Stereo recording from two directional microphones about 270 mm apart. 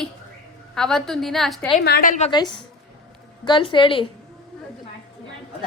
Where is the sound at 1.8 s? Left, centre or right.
Left.